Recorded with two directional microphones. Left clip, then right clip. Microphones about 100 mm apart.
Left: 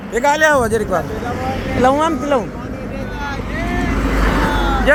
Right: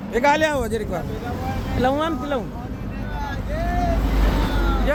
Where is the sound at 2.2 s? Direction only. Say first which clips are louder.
Left 8 dB; centre (ahead or behind).